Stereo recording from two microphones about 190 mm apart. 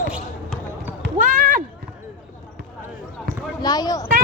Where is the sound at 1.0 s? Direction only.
50° right (ahead or behind).